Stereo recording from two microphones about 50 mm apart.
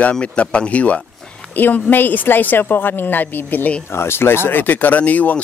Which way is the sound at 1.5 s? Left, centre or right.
Left.